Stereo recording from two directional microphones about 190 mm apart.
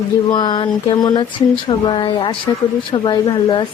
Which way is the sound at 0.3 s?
25° left (ahead or behind).